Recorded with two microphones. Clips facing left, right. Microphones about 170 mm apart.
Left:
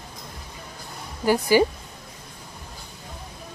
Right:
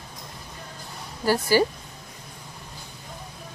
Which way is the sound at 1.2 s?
15° left (ahead or behind).